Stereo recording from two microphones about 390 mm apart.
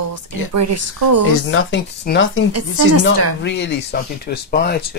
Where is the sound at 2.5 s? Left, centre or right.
Right.